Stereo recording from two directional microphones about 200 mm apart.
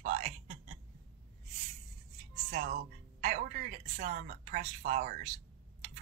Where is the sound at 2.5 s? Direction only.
45° right (ahead or behind).